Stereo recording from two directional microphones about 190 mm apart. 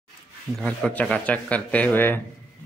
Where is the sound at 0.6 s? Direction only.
5° left (ahead or behind).